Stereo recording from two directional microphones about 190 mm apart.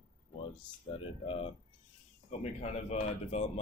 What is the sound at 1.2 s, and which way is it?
Speech, 30° left (ahead or behind).